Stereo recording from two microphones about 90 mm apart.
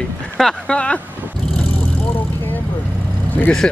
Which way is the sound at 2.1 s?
20° left (ahead or behind).